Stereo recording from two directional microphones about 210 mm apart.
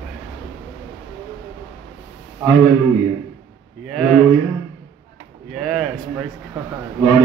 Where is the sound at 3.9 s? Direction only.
Centre (ahead or behind).